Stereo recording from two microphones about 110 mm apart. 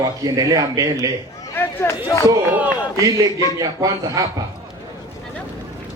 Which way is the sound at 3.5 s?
35° right (ahead or behind).